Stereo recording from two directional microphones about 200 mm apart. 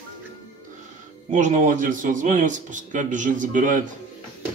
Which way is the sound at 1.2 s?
40° right (ahead or behind).